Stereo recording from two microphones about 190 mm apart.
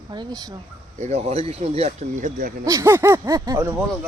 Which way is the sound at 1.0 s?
35° right (ahead or behind).